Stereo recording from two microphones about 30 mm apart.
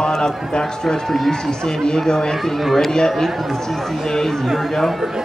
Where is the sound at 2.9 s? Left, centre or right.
Centre.